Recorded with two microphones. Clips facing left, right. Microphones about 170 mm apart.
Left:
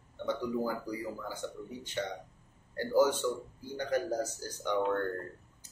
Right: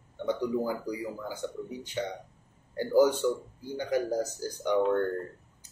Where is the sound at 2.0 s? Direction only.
10° right (ahead or behind).